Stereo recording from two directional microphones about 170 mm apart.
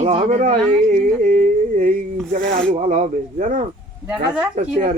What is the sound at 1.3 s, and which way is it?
Humming, 50° right (ahead or behind).